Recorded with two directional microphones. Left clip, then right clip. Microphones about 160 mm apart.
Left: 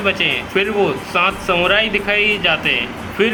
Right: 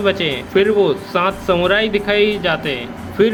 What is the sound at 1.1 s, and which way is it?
Speech, 60° right (ahead or behind).